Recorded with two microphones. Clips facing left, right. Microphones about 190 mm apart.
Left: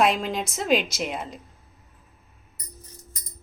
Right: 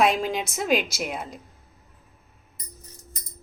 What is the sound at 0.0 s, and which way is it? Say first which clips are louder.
A woman's voice: even; centre (ahead or behind).